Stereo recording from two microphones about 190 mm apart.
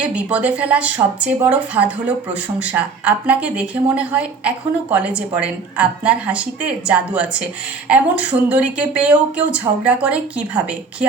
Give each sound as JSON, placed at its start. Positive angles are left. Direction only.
{"t": 0.0, "sound": "a woman's voice", "side_deg": -5}